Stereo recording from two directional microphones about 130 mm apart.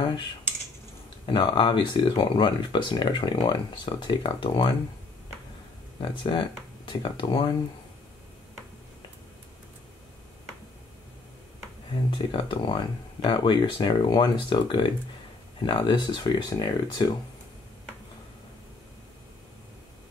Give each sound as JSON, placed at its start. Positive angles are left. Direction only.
{"t": 1.2, "sound": "speech", "side_deg": 35}
{"t": 6.0, "sound": "speech", "side_deg": 40}
{"t": 12.3, "sound": "speech", "side_deg": 40}